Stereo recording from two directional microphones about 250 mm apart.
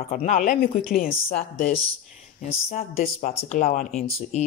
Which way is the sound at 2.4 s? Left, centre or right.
Left.